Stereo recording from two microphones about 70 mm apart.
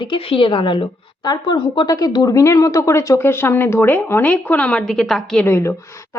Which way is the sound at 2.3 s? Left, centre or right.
Left.